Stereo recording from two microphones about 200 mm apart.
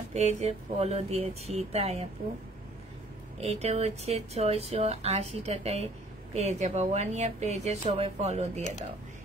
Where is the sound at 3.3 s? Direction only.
30° right (ahead or behind).